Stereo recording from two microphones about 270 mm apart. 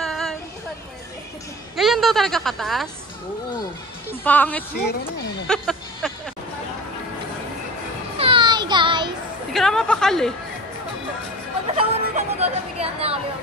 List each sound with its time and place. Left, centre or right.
0.0 s a sound: centre
1.8 s a woman's voice: centre
4.1 s a woman's voice: centre
5.5 s music: centre
8.2 s a sound: centre
9.5 s a woman's voice: centre
11.7 s speech: right